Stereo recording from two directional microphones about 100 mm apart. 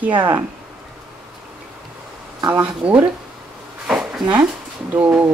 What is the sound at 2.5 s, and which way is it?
Speech, 15° right (ahead or behind).